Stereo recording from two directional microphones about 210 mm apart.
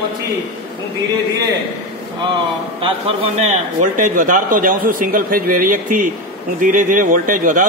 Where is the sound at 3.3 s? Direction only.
35° right (ahead or behind).